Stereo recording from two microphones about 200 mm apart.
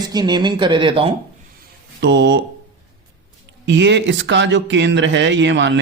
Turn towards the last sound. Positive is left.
turn(degrees=-65)  # may be behind; listen again after turning